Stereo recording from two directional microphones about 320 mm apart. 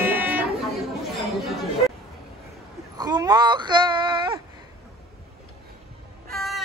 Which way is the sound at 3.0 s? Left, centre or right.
Centre.